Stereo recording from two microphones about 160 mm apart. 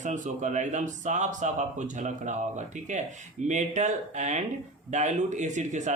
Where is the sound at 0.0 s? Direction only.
50° right (ahead or behind).